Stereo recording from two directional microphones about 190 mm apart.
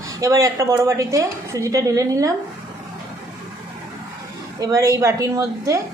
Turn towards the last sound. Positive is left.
turn(degrees=-15)  # may be behind; listen again after turning